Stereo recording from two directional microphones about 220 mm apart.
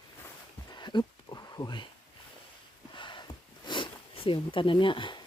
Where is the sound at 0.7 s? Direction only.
20° left (ahead or behind).